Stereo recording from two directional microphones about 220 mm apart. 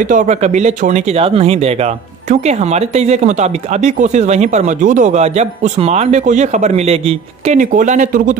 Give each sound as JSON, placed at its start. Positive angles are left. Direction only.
{"t": 0.1, "sound": "speech", "side_deg": -35}